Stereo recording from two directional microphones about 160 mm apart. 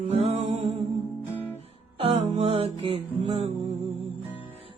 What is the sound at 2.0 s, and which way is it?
Music, 40° right (ahead or behind).